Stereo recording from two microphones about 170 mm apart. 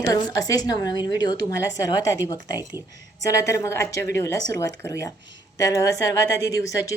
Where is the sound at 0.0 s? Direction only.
20° left (ahead or behind).